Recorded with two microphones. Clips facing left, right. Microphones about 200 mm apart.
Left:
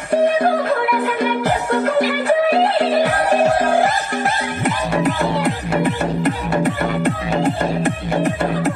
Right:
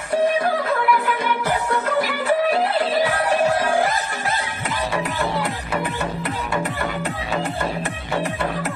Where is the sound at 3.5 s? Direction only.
45° left (ahead or behind).